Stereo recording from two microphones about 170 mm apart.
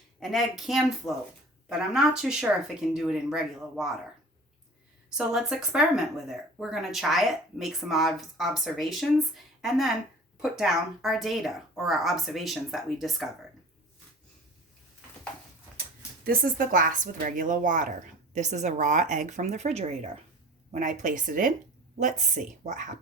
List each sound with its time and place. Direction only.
0.2 s speech: centre (ahead or behind)
5.1 s speech: 5° right (ahead or behind)
16.2 s a woman's voice: 60° right (ahead or behind)